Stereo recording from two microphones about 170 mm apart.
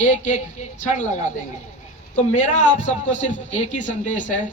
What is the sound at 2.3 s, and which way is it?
A man's voice, 45° left (ahead or behind).